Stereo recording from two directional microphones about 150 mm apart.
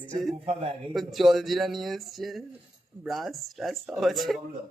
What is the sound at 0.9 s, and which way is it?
Speech, centre (ahead or behind).